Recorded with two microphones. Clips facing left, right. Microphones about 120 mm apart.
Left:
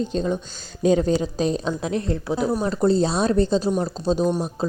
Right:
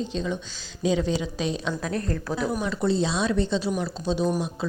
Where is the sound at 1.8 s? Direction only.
25° left (ahead or behind).